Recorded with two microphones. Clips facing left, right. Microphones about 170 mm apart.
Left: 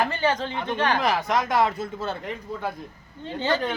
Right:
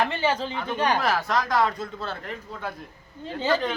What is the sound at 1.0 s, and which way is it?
Speech, 15° left (ahead or behind).